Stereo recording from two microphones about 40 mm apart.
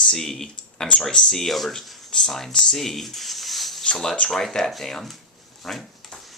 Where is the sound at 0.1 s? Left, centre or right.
Centre.